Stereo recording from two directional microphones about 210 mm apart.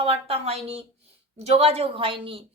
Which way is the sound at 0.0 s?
30° right (ahead or behind).